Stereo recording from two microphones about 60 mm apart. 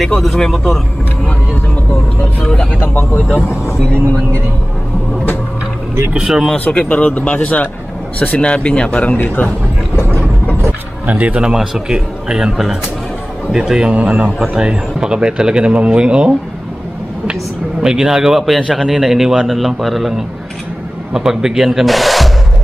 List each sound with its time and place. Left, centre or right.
0.2 s speech: centre
2.4 s speech: centre
2.8 s speech: left
6.1 s a man's voice: centre
6.6 s speech: left
8.5 s speech: centre
9.2 s a man's voice: left
11.1 s speech: right
11.5 s a man's voice: centre
13.9 s a man's voice: right
17.8 s speech: centre